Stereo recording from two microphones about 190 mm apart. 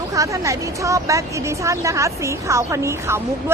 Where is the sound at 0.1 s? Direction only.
15° right (ahead or behind).